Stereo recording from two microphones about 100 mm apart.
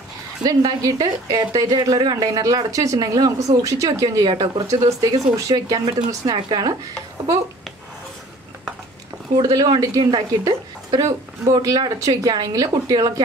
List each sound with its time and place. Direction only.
0.4 s a woman's voice: 45° right (ahead or behind)
2.1 s a woman's voice: 35° right (ahead or behind)
9.4 s a woman's voice: 40° right (ahead or behind)